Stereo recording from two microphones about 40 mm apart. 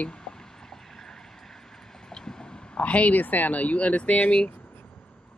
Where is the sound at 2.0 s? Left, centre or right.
Centre.